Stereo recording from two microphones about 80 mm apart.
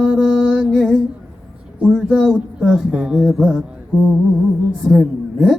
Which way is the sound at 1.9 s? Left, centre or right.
Centre.